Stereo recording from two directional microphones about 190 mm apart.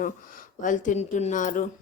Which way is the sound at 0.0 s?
45° left (ahead or behind).